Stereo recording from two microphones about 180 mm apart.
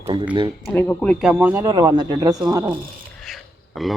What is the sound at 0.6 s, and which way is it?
Speech, 10° left (ahead or behind).